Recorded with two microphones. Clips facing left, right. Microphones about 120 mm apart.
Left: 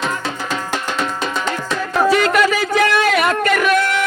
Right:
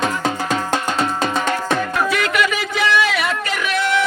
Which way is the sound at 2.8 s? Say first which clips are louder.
Left 2 dB; 50° left (ahead or behind).